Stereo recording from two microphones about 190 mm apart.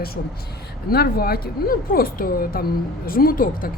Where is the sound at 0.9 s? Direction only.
50° left (ahead or behind).